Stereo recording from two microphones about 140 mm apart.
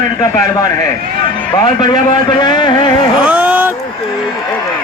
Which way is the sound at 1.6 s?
30° left (ahead or behind).